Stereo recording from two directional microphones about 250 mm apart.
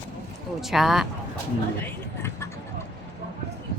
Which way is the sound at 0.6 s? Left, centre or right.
Centre.